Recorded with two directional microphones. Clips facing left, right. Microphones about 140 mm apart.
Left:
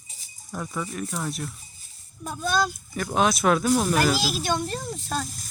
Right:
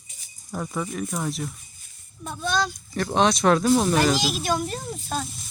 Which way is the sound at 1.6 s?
35° left (ahead or behind).